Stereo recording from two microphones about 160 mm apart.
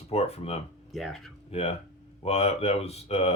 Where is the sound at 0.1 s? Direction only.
40° left (ahead or behind).